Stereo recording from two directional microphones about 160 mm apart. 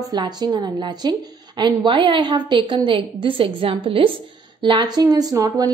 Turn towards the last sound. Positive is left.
turn(degrees=-20)  # may be behind; listen again after turning